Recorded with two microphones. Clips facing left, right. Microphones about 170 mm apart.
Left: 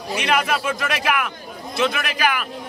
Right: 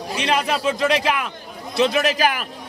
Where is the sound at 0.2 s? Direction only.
30° right (ahead or behind).